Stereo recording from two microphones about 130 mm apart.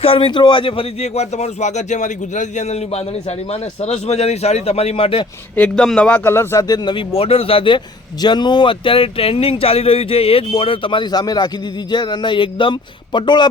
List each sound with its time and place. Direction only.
0.0 s speech: 45° left (ahead or behind)
5.5 s speech: 5° left (ahead or behind); by 13.5 s 35° left (ahead or behind)